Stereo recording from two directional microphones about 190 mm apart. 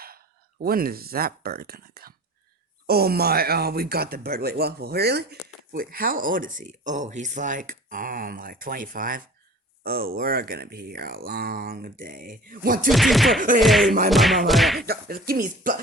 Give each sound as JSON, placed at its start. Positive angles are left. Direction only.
{"t": 0.6, "sound": "speech", "side_deg": -50}
{"t": 12.9, "sound": "music", "side_deg": 0}
{"t": 14.8, "sound": "speech", "side_deg": -55}